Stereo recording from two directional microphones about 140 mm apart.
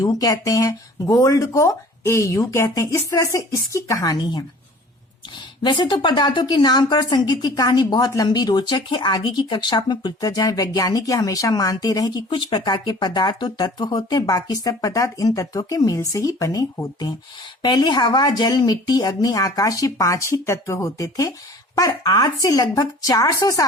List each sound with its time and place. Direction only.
0.0 s a woman's voice: 25° left (ahead or behind)